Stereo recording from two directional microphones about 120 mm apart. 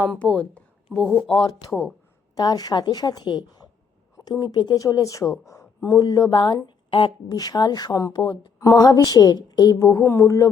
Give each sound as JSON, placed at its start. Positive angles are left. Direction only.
{"t": 0.9, "sound": "speech", "side_deg": 0}
{"t": 1.3, "sound": "a woman's voice", "side_deg": 35}
{"t": 8.6, "sound": "a woman's voice", "side_deg": 30}